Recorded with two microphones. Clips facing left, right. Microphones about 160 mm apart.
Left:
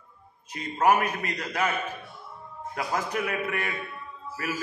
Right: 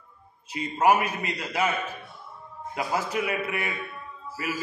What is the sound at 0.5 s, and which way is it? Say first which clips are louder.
A man's voice: right 1 dB; 10° right (ahead or behind).